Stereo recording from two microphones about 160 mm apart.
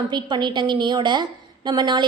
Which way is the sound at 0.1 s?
30° right (ahead or behind).